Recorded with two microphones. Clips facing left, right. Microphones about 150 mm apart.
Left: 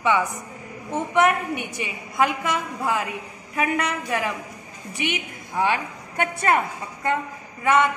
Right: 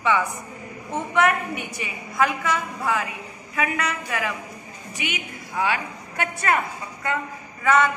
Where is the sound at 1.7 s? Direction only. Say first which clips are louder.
Even; 20° left (ahead or behind).